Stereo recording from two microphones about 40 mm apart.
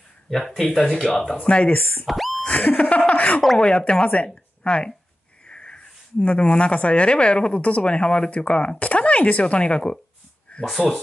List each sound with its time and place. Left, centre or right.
0.3 s speech: centre
1.0 s speech: centre
1.4 s speech: left
2.0 s speech: centre
2.4 s a sound: left
3.5 s speech: left
10.5 s a sound: left